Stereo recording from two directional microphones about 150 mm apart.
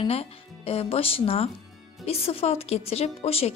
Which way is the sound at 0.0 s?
40° left (ahead or behind).